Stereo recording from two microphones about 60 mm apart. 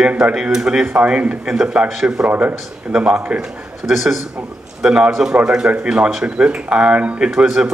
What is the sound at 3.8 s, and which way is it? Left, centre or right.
A man's voice, centre.